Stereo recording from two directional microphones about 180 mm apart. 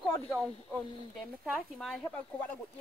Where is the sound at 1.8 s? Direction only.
Centre (ahead or behind).